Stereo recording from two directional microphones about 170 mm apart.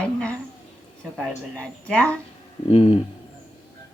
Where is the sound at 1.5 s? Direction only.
5° left (ahead or behind).